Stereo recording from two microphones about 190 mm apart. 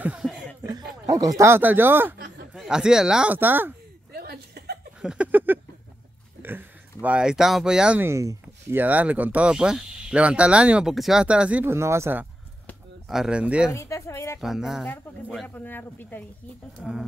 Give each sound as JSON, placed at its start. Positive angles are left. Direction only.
{"t": 0.0, "sound": "chuckle", "side_deg": -5}
{"t": 1.0, "sound": "speech", "side_deg": -20}
{"t": 2.1, "sound": "a sound", "side_deg": -60}
{"t": 2.5, "sound": "speech", "side_deg": -5}
{"t": 4.1, "sound": "chuckle", "side_deg": -55}
{"t": 5.0, "sound": "a sound", "side_deg": -5}
{"t": 6.4, "sound": "speech", "side_deg": -10}
{"t": 13.7, "sound": "a sound", "side_deg": 15}
{"t": 14.4, "sound": "speech", "side_deg": 0}
{"t": 15.4, "sound": "speech", "side_deg": 10}
{"t": 16.7, "sound": "speech", "side_deg": -5}